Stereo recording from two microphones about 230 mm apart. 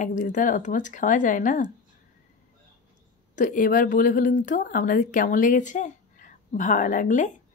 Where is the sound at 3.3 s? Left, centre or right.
Left.